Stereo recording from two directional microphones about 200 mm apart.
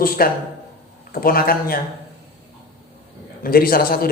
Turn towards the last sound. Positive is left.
turn(degrees=50)  # may be behind; listen again after turning